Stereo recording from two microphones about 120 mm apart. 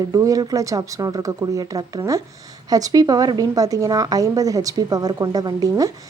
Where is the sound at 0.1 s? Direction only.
30° right (ahead or behind).